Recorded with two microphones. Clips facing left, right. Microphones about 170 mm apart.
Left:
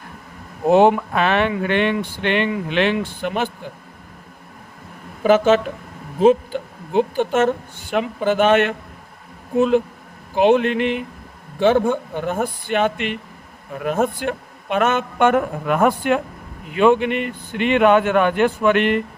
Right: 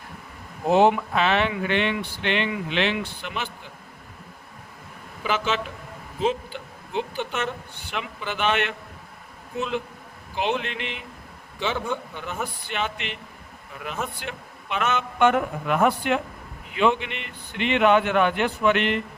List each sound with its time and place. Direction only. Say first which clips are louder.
0.7 s speech: left 5 dB; 50° left (ahead or behind)
5.2 s speech: left 12 dB; 50° left (ahead or behind)